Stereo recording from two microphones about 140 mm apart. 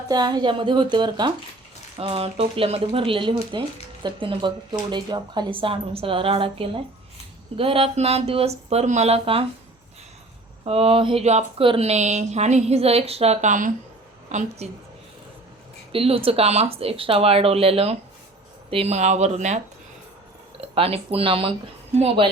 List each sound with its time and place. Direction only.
0.1 s speech: 30° right (ahead or behind)
2.0 s speech: 45° right (ahead or behind)
10.7 s a woman's voice: 45° right (ahead or behind)
15.9 s speech: 40° right (ahead or behind)
20.6 s speech: 45° right (ahead or behind)